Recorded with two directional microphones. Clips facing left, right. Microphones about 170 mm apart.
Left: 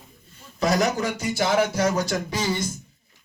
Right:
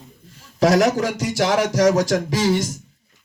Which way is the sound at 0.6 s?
90° right.